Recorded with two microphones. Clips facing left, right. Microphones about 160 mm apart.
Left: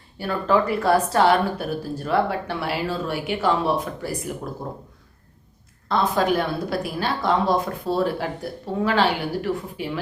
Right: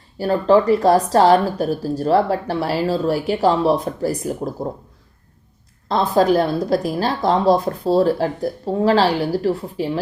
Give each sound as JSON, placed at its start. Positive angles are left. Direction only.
{"t": 0.2, "sound": "speech", "side_deg": -35}
{"t": 5.9, "sound": "speech", "side_deg": -35}